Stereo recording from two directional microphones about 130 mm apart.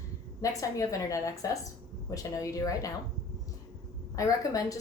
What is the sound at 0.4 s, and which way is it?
Speech, 25° left (ahead or behind).